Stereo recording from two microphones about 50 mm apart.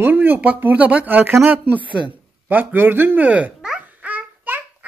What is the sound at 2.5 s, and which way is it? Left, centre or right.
Speech, right.